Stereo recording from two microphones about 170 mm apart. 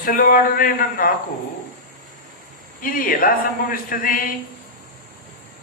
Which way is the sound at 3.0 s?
55° left (ahead or behind).